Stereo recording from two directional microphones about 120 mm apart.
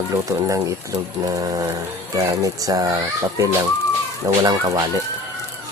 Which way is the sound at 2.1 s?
30° right (ahead or behind).